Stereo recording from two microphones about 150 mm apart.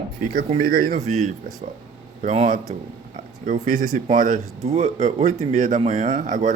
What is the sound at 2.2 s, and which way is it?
Speech, 55° right (ahead or behind).